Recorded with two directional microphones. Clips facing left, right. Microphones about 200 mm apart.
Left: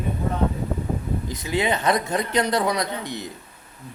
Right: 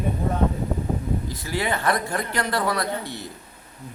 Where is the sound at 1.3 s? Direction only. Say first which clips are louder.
Left 7 dB; 20° left (ahead or behind).